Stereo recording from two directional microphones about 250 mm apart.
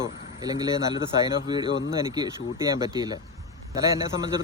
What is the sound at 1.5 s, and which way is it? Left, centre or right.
Speech, centre.